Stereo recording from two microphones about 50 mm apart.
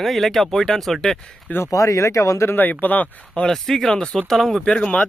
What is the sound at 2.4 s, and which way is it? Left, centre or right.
Speech, left.